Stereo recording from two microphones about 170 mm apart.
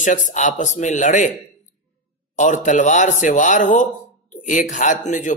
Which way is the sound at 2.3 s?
45° left (ahead or behind).